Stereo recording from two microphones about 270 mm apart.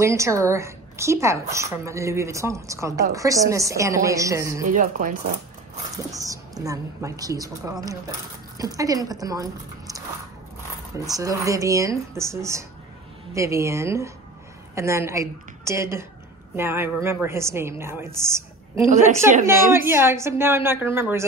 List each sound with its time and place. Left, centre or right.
0.0 s a woman's voice: centre
4.6 s speech: right
6.1 s a woman's voice: centre
19.4 s a woman's voice: centre